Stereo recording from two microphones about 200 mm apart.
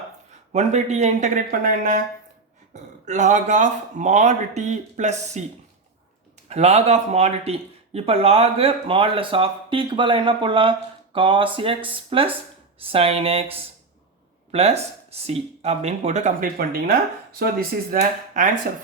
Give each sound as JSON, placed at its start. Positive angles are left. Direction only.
{"t": 0.5, "sound": "speech", "side_deg": -35}
{"t": 6.5, "sound": "speech", "side_deg": -35}
{"t": 14.5, "sound": "speech", "side_deg": -30}